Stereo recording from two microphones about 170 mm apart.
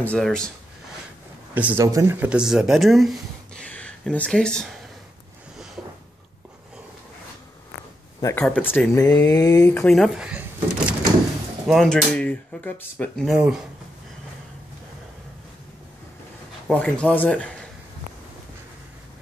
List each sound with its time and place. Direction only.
0.0 s speech: 5° left (ahead or behind)
1.5 s speech: 10° right (ahead or behind)
8.2 s speech: 20° left (ahead or behind)
13.3 s speech: 5° right (ahead or behind)
16.7 s speech: 5° left (ahead or behind)